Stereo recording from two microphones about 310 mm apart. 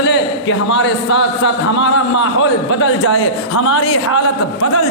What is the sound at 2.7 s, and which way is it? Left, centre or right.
Speech, left.